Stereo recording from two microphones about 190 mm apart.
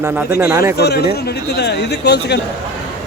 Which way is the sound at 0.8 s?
60° left (ahead or behind).